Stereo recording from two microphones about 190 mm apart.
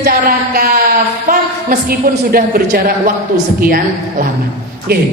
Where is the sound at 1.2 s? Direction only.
45° right (ahead or behind).